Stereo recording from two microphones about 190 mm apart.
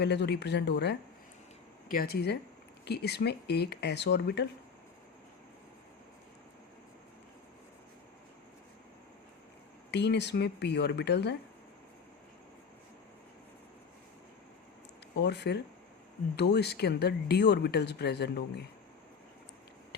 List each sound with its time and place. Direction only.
0.0 s speech: 60° left (ahead or behind)
9.9 s speech: 65° left (ahead or behind)
15.1 s speech: 65° left (ahead or behind)